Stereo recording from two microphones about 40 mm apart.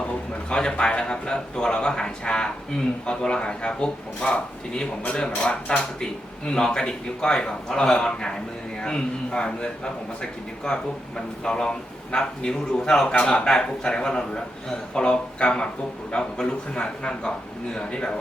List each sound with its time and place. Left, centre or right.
0.5 s a man's voice: centre